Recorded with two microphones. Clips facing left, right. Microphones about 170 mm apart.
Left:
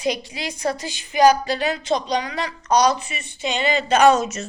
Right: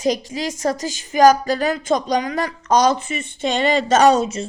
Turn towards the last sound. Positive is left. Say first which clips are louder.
# right 1 dB
turn(degrees=-30)  # may be behind; listen again after turning